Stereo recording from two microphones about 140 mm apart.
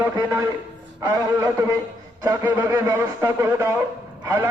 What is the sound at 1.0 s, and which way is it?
A man's voice, 25° right (ahead or behind).